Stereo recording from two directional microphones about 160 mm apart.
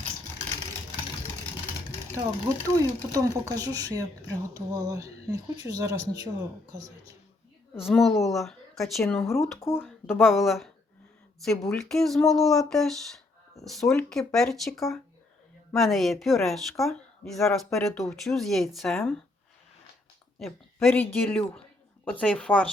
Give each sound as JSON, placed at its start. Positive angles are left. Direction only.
{"t": 2.6, "sound": "speech", "side_deg": -20}
{"t": 7.8, "sound": "speech", "side_deg": 0}
{"t": 9.6, "sound": "speech", "side_deg": 15}
{"t": 10.2, "sound": "speech", "side_deg": 0}
{"t": 20.8, "sound": "speech", "side_deg": 10}